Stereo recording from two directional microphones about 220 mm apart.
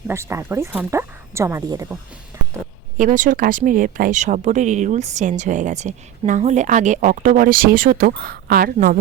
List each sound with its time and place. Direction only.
0.1 s speech: 10° right (ahead or behind)
2.3 s a sound: 15° right (ahead or behind)
3.0 s speech: 35° right (ahead or behind)